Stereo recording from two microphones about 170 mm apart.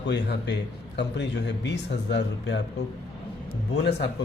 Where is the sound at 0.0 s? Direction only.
90° left.